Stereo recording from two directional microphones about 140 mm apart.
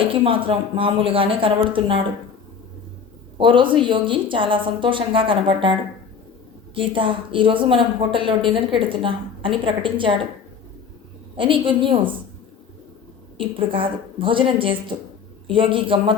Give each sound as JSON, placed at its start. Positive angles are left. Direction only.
{"t": 0.0, "sound": "a woman's voice", "side_deg": -40}
{"t": 3.3, "sound": "a woman's voice", "side_deg": -35}
{"t": 6.7, "sound": "a woman's voice", "side_deg": -35}
{"t": 11.3, "sound": "a woman's voice", "side_deg": -40}
{"t": 13.4, "sound": "a woman's voice", "side_deg": -40}